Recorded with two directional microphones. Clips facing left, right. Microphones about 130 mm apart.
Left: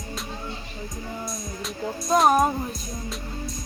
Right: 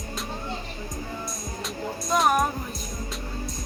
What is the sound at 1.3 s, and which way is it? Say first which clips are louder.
Music: left 1 dB; centre (ahead or behind).